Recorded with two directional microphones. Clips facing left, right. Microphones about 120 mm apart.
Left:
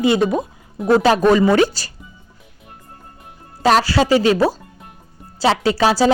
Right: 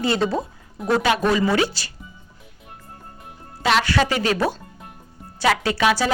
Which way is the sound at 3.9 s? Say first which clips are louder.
Left 6 dB; 30° left (ahead or behind).